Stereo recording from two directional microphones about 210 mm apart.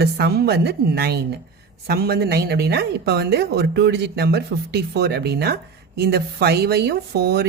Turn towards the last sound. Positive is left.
turn(degrees=-50)  # may be behind; listen again after turning